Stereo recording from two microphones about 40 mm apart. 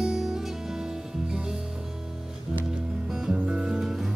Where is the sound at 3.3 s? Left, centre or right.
Centre.